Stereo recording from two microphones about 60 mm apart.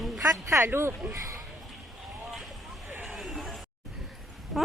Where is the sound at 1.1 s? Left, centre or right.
Right.